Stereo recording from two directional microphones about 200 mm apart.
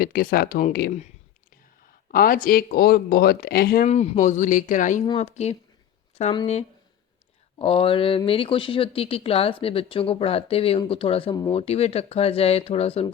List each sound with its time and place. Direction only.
0.0 s speech: 45° left (ahead or behind)
3.8 s speech: 35° left (ahead or behind)